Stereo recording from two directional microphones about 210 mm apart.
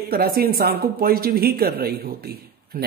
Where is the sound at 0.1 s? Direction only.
45° right (ahead or behind).